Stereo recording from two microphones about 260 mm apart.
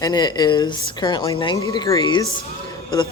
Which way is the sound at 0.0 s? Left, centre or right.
Centre.